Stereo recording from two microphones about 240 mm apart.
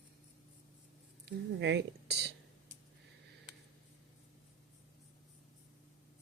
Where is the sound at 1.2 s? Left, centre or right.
Right.